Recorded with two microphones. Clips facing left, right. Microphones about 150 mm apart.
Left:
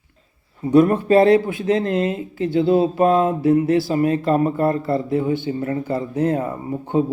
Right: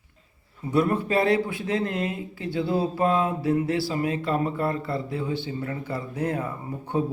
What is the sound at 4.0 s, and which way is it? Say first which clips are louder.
Speech: left 8 dB; 20° right (ahead or behind).